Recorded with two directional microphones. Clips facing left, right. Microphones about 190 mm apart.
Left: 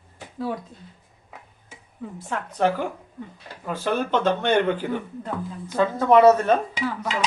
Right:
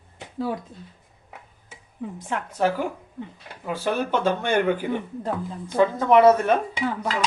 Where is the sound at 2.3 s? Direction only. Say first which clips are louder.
Left 1 dB; 5° right (ahead or behind).